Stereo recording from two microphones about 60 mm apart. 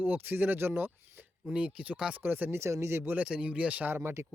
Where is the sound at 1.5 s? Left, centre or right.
Centre.